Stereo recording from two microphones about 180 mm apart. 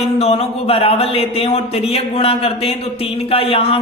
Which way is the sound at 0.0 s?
35° left (ahead or behind).